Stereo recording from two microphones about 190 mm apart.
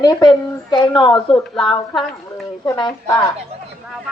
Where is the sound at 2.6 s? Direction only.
20° left (ahead or behind).